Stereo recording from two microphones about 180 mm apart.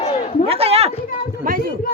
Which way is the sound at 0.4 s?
35° right (ahead or behind).